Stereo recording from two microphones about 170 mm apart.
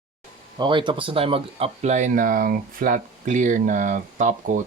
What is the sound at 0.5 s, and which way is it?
Speech, 25° right (ahead or behind).